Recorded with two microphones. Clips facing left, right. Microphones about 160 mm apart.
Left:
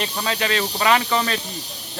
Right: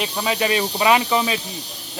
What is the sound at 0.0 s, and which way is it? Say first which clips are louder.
Speech: right 3 dB; 10° right (ahead or behind).